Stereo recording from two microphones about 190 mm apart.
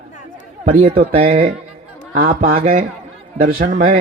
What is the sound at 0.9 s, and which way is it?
Speech, 35° right (ahead or behind).